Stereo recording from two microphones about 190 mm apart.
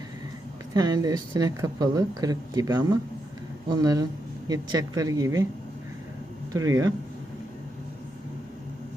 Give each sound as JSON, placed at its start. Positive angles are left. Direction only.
{"t": 0.7, "sound": "speech", "side_deg": -20}
{"t": 6.5, "sound": "speech", "side_deg": -20}